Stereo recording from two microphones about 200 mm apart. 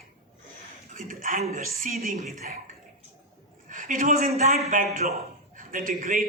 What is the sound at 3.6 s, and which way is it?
A man's voice, 40° right (ahead or behind).